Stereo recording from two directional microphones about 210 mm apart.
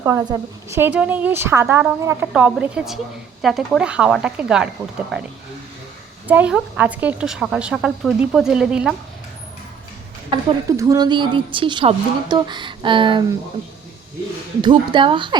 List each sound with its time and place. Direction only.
0.0 s a woman's voice: 15° right (ahead or behind)
10.3 s a woman's voice: 15° right (ahead or behind)
14.6 s a woman's voice: 25° right (ahead or behind)